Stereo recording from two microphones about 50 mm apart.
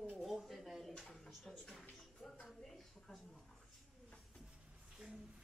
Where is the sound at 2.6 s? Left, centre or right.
Centre.